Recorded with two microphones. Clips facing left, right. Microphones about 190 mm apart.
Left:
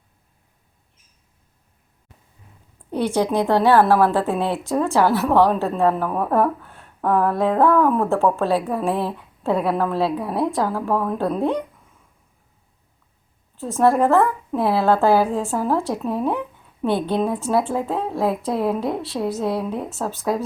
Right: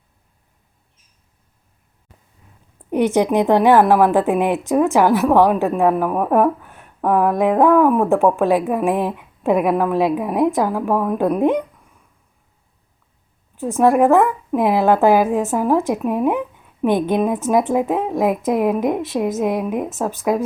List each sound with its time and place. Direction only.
2.9 s a woman's voice: 20° right (ahead or behind)
13.6 s a woman's voice: 15° right (ahead or behind)